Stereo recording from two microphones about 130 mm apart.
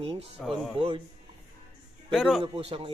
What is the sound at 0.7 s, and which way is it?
Speech, 45° right (ahead or behind).